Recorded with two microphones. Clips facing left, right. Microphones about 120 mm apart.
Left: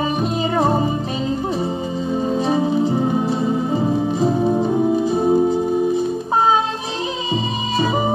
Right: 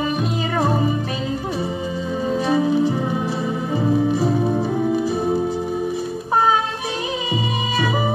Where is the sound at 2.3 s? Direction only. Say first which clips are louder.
Right 1 dB; 30° left (ahead or behind).